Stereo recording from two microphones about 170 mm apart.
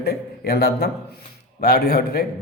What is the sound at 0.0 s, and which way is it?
A man's voice, 70° left (ahead or behind).